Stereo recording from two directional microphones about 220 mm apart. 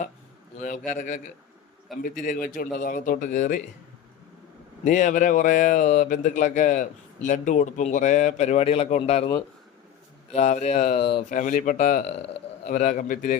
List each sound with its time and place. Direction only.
0.9 s speech: 35° left (ahead or behind)
1.9 s speech: centre (ahead or behind)
2.2 s speech: 35° left (ahead or behind)
4.8 s speech: 35° left (ahead or behind)